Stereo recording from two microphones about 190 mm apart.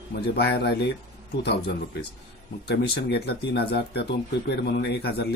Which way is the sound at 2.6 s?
60° left (ahead or behind).